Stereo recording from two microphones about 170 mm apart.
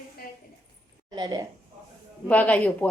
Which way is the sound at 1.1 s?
25° right (ahead or behind).